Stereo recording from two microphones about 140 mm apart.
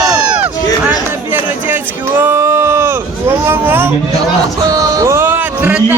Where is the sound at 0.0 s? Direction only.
10° right (ahead or behind).